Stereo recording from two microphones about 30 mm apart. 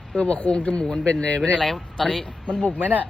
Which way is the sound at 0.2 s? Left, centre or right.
Left.